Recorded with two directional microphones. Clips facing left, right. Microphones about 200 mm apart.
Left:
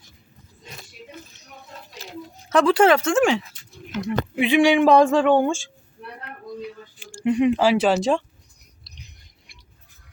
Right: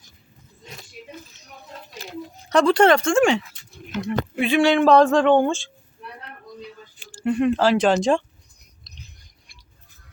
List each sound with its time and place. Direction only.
2.5 s speech: 5° left (ahead or behind)
3.9 s speech: 15° left (ahead or behind)
7.2 s speech: 15° left (ahead or behind)
8.8 s chewing: 15° left (ahead or behind)